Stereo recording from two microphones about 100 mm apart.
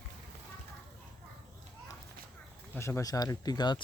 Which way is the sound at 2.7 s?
30° left (ahead or behind).